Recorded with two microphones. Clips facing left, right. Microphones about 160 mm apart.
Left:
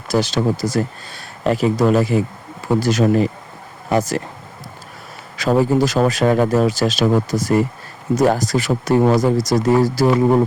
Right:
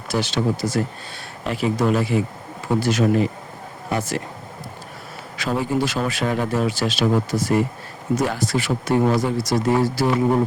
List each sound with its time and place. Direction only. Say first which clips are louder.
0.1 s speech: left 4 dB; 40° left (ahead or behind)
5.4 s speech: left 7 dB; 40° left (ahead or behind)